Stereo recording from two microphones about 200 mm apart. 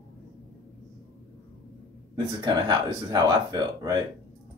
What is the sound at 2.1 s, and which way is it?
Speech, 20° right (ahead or behind).